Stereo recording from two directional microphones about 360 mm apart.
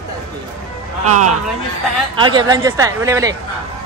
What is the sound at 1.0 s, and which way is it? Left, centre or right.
Speech, right.